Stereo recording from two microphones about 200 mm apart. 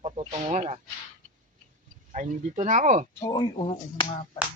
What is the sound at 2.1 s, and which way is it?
Speech, 40° right (ahead or behind).